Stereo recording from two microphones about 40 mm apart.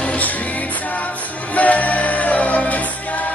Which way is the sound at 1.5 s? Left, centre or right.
Left.